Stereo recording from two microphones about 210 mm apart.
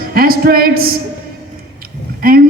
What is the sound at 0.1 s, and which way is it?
Speech, 45° right (ahead or behind).